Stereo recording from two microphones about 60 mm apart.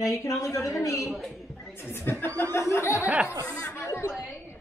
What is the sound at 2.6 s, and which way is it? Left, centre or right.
Speech, left.